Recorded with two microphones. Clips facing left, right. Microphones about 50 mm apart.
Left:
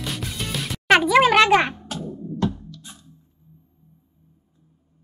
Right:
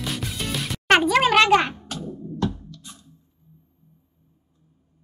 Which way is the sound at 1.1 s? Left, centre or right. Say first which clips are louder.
Left 3 dB; centre.